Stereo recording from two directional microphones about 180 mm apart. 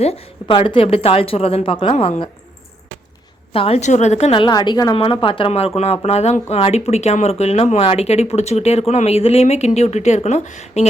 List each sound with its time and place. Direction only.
0.0 s a woman's voice: 35° left (ahead or behind)
3.5 s a woman's voice: 30° left (ahead or behind)